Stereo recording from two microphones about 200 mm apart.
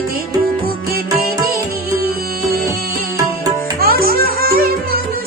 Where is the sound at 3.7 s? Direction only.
50° right (ahead or behind).